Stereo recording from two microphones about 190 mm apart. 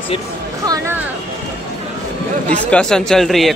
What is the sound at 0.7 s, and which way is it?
Speech, 15° right (ahead or behind).